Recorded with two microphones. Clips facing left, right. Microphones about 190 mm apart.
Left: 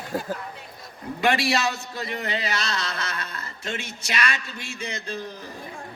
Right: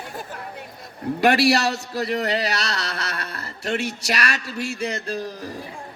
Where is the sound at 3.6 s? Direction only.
70° right (ahead or behind).